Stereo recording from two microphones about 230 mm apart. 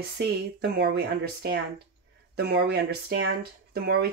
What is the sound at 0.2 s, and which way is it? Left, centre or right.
Speech, right.